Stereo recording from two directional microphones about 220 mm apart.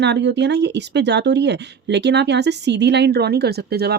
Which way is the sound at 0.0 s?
50° right (ahead or behind).